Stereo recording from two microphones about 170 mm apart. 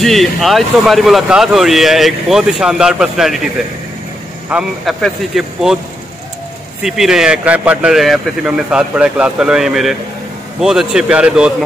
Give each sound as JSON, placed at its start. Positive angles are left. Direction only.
{"t": 0.0, "sound": "speech", "side_deg": 0}
{"t": 4.5, "sound": "speech", "side_deg": -5}
{"t": 6.8, "sound": "speech", "side_deg": 0}